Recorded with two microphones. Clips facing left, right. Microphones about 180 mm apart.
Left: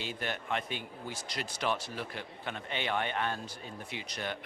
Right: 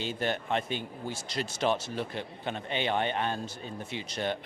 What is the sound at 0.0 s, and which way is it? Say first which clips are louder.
A man's voice: right 6 dB; 30° right (ahead or behind).